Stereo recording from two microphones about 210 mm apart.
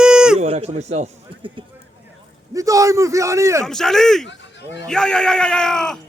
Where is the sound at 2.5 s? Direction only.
15° right (ahead or behind).